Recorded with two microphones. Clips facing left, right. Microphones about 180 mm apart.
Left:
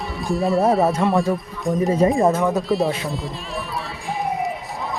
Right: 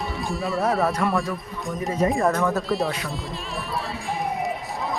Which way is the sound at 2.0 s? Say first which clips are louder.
Left 3 dB; 30° left (ahead or behind).